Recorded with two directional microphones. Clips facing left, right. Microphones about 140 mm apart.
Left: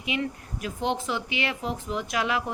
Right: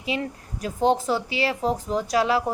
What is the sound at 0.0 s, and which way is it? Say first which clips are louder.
Speech: right 1 dB; 35° right (ahead or behind).